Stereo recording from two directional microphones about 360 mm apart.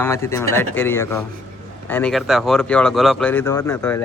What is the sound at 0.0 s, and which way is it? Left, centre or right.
Speech, centre.